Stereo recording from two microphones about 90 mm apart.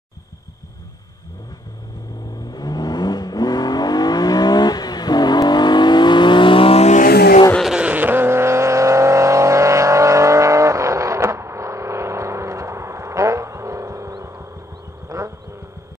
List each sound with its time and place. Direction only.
2.5 s vehicle: 50° left (ahead or behind); by 6.8 s 85° left
7.7 s vehicle: 15° right (ahead or behind); by 14.1 s 35° right (ahead or behind)
14.2 s a sound: 30° right (ahead or behind)